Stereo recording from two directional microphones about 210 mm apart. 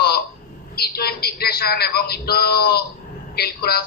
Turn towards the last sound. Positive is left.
turn(degrees=50)  # may be behind; listen again after turning